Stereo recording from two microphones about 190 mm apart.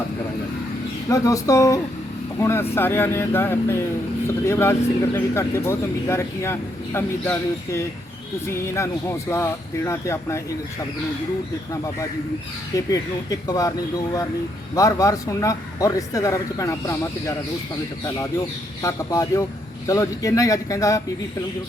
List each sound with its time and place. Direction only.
1.1 s speech: 15° left (ahead or behind)
12.7 s speech: 15° left (ahead or behind)
18.8 s speech: 15° left (ahead or behind)